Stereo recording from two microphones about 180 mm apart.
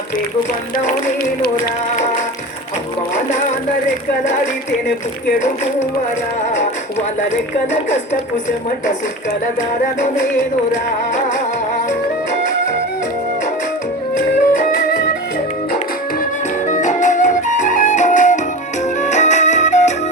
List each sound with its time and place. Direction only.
7.7 s speech: 40° left (ahead or behind)
14.5 s music: 50° left (ahead or behind)
16.6 s flute: 45° left (ahead or behind)
19.0 s music: 40° left (ahead or behind)